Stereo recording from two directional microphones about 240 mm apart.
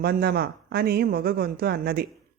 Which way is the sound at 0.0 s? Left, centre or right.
Right.